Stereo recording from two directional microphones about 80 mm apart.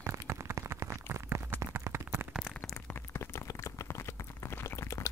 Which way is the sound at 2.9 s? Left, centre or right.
Left.